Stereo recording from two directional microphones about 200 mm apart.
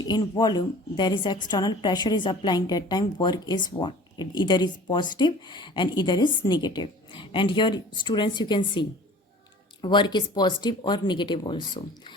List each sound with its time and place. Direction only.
0.1 s speech: 20° left (ahead or behind)